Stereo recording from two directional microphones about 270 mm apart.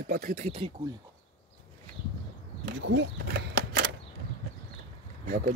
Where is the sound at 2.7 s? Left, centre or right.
Right.